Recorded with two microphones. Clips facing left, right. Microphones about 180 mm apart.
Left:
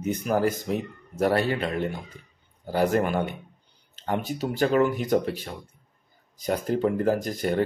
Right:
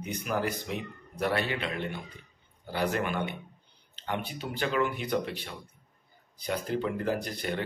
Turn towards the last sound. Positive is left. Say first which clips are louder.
# left 7 dB
turn(degrees=45)  # may be behind; listen again after turning